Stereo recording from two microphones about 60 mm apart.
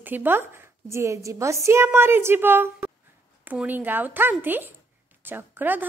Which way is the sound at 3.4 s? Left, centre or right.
Right.